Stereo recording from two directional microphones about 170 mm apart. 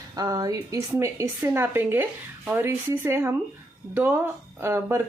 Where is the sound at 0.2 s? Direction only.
20° right (ahead or behind).